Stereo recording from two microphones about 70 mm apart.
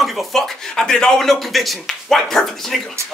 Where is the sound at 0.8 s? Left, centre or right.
Centre.